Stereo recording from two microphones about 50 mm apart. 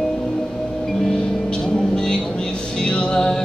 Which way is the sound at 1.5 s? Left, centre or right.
Centre.